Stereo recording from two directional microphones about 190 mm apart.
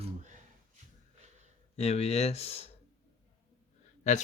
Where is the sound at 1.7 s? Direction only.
35° left (ahead or behind).